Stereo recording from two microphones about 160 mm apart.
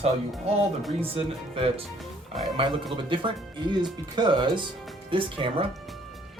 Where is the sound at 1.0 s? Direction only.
35° right (ahead or behind).